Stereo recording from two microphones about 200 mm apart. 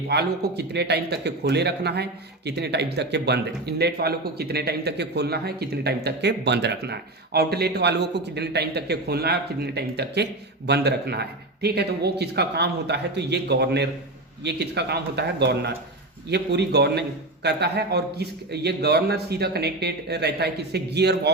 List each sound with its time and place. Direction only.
0.1 s speech: 55° right (ahead or behind)